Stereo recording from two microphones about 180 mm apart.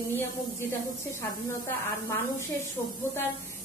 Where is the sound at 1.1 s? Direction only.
15° left (ahead or behind).